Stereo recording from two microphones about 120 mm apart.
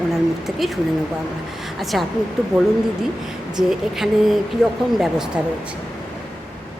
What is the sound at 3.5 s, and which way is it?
A woman's voice, 5° right (ahead or behind).